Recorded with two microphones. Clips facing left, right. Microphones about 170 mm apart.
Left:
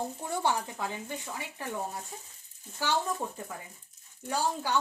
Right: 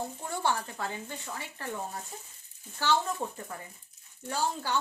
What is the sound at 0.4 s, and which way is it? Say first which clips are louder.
A woman's voice: even; 15° left (ahead or behind).